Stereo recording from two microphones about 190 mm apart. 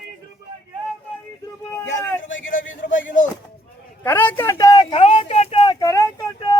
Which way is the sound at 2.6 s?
80° left.